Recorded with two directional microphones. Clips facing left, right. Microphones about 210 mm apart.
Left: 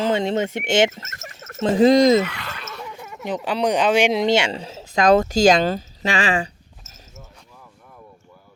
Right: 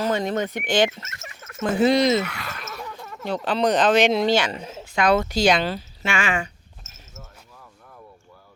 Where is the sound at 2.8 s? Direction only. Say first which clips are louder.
Left 1 dB; 10° left (ahead or behind); by 6.5 s 35° left (ahead or behind).